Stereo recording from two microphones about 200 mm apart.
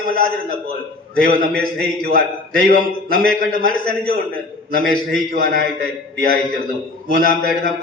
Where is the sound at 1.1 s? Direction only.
50° right (ahead or behind).